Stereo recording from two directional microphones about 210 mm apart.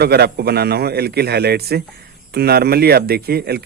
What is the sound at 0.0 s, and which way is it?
A man's voice, 50° right (ahead or behind).